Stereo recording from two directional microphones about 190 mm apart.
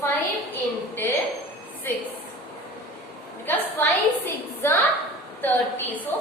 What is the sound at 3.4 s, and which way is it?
A woman's voice, 10° left (ahead or behind).